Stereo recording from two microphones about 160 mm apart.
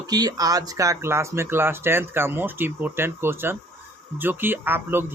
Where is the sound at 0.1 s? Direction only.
25° right (ahead or behind).